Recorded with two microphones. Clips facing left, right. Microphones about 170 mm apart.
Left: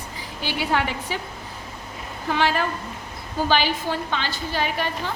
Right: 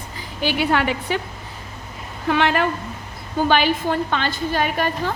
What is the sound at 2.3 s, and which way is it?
A woman's voice, 65° right (ahead or behind).